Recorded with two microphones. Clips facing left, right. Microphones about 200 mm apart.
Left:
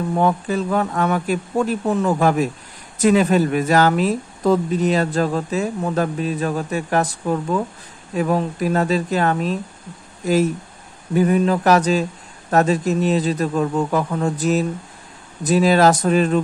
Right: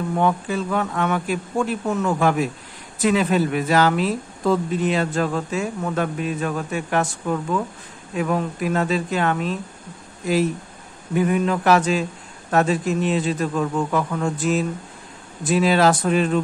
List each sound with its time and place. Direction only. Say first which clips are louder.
0.1 s a woman's voice: left 2 dB; 40° left (ahead or behind)